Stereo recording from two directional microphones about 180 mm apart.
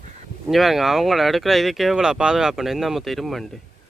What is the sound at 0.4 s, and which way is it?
Speech, centre (ahead or behind).